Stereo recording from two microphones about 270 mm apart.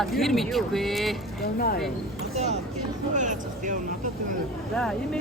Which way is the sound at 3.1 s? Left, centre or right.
Right.